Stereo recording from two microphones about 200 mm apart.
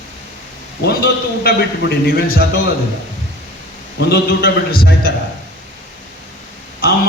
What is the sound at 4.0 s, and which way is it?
A man's voice, 55° left (ahead or behind).